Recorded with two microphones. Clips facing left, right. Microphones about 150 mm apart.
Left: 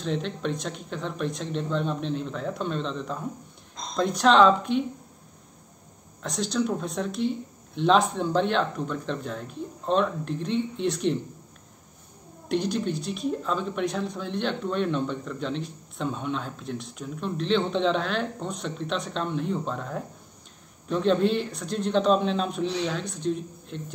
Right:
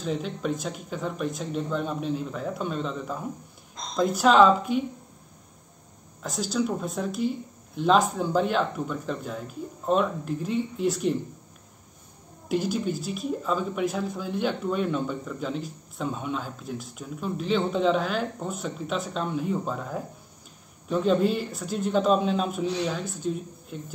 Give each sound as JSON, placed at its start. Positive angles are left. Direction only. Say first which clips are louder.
{"t": 0.0, "sound": "speech", "louder": "even", "side_deg": -5}
{"t": 6.2, "sound": "speech", "louder": "even", "side_deg": 0}
{"t": 12.4, "sound": "speech", "louder": "even", "side_deg": -5}